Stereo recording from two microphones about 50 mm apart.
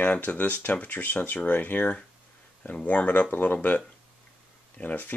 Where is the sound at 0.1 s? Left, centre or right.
Left.